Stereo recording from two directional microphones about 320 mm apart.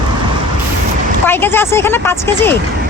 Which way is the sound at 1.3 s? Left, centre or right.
Centre.